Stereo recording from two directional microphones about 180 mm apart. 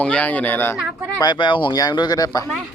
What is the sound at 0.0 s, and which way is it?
Speech, 5° left (ahead or behind).